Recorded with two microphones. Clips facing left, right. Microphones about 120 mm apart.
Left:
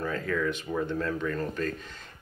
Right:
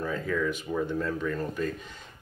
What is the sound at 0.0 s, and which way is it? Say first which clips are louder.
A man's voice: even; 5° right (ahead or behind).